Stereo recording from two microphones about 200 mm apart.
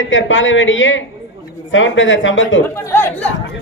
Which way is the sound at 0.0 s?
70° left (ahead or behind).